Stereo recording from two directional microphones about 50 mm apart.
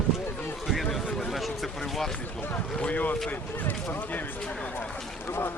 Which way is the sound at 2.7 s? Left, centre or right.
Left.